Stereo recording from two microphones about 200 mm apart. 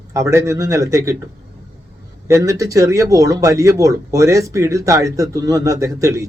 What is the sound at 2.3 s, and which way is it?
Speech, 15° right (ahead or behind).